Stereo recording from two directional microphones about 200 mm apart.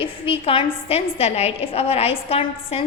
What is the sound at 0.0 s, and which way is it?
A woman's voice, 25° left (ahead or behind).